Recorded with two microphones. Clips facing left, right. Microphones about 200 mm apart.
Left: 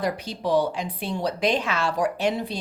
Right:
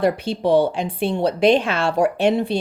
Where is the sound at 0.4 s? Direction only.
25° right (ahead or behind).